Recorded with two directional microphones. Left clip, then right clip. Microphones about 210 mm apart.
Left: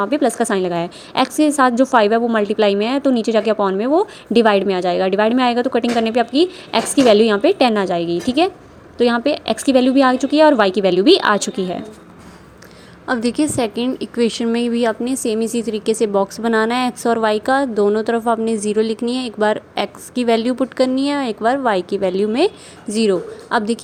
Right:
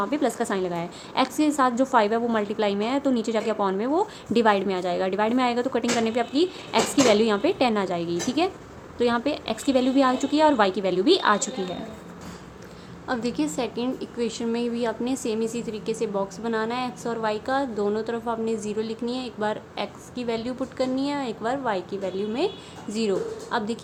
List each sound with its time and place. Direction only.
0.0 s a woman's voice: 30° left (ahead or behind)
13.1 s a woman's voice: 30° left (ahead or behind)